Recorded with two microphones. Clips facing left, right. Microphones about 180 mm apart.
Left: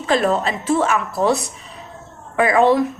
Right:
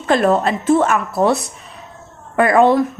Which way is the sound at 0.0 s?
50° right (ahead or behind).